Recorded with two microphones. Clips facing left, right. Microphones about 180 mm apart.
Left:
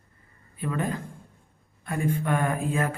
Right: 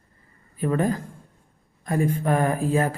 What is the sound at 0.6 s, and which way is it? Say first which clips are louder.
Speech: right 6 dB; 40° right (ahead or behind).